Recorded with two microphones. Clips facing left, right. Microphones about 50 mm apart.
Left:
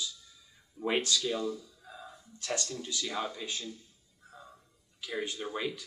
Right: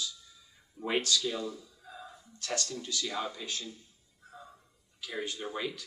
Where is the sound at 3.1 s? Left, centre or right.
Centre.